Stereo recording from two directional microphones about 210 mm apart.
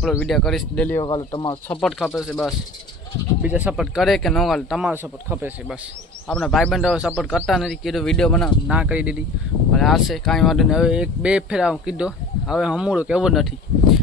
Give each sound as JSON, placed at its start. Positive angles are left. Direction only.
{"t": 0.0, "sound": "speech", "side_deg": 0}
{"t": 1.0, "sound": "speech", "side_deg": 20}
{"t": 1.7, "sound": "speech", "side_deg": 5}
{"t": 6.2, "sound": "speech", "side_deg": 0}